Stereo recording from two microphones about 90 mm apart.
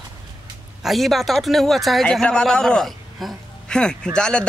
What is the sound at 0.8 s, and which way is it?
A man's voice, centre (ahead or behind).